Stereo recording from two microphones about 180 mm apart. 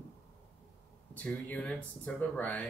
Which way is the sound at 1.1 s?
5° left (ahead or behind).